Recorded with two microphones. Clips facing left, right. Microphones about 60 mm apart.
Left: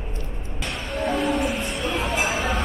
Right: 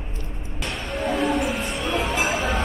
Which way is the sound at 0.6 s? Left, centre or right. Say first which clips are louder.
Even; centre.